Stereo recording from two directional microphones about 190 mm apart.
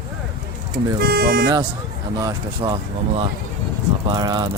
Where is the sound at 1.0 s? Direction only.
55° right (ahead or behind).